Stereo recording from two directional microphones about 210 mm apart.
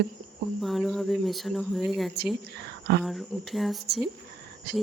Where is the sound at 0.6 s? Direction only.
Centre (ahead or behind).